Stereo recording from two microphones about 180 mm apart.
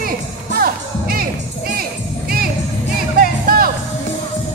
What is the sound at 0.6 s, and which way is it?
Music, 55° right (ahead or behind).